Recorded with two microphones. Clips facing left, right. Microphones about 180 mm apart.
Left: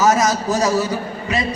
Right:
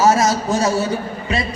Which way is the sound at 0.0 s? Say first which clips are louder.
Right 1 dB; 25° right (ahead or behind).